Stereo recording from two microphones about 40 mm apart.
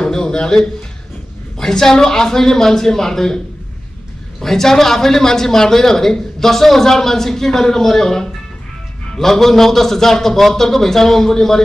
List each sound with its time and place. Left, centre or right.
0.0 s speech: centre
1.6 s speech: centre
4.4 s speech: centre